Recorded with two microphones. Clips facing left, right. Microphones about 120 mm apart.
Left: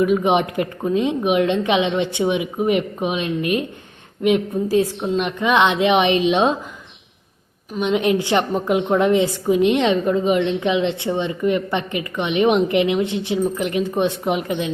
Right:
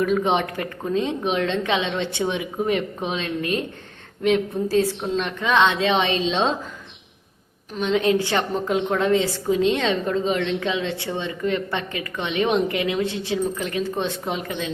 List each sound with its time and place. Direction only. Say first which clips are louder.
0.0 s a woman's voice: left 4 dB; 10° left (ahead or behind)
7.7 s a woman's voice: left 2 dB; 15° left (ahead or behind)